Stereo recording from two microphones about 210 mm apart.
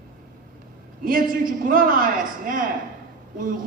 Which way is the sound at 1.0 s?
40° right (ahead or behind).